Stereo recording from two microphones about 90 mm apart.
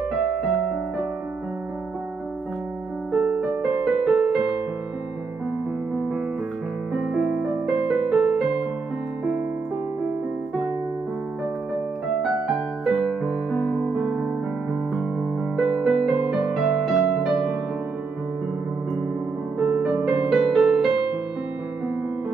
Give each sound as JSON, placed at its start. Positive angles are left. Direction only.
{"t": 3.1, "sound": "music", "side_deg": 0}
{"t": 6.9, "sound": "music", "side_deg": -5}
{"t": 12.2, "sound": "music", "side_deg": 0}
{"t": 15.5, "sound": "music", "side_deg": 0}
{"t": 19.6, "sound": "music", "side_deg": -5}